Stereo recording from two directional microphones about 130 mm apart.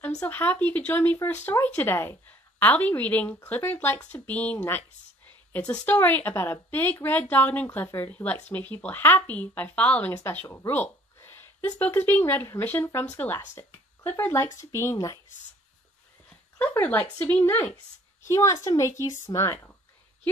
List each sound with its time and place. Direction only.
0.2 s a woman's voice: 15° left (ahead or behind)
16.5 s a woman's voice: 10° left (ahead or behind)